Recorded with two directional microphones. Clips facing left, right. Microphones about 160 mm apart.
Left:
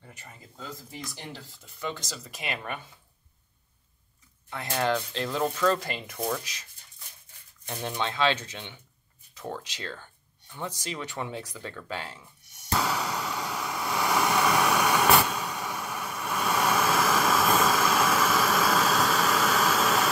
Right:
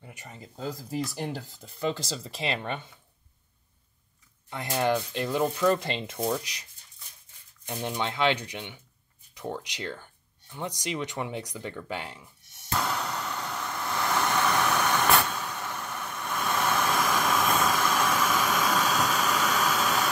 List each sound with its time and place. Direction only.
0.0 s a sound: 15° right (ahead or behind)
0.6 s speech: 40° right (ahead or behind)
4.5 s speech: 20° right (ahead or behind)
5.9 s speech: 25° right (ahead or behind)
12.7 s vehicle: 5° left (ahead or behind)